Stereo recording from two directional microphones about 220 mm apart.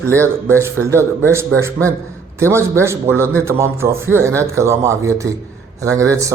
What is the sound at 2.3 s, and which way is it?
A man's voice, 10° right (ahead or behind).